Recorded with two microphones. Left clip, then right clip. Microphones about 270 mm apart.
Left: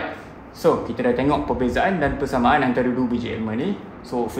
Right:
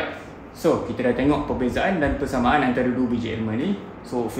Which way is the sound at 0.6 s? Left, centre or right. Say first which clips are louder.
Left 2 dB; centre.